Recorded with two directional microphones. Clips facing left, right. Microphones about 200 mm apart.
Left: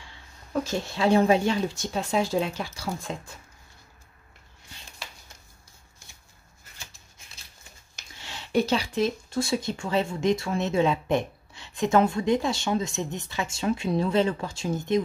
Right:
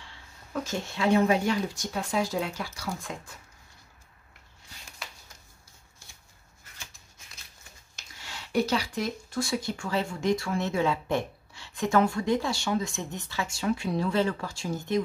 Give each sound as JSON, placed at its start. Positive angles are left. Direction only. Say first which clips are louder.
{"t": 0.5, "sound": "speech", "louder": "left 4 dB", "side_deg": 30}
{"t": 8.2, "sound": "speech", "louder": "left 2 dB", "side_deg": 25}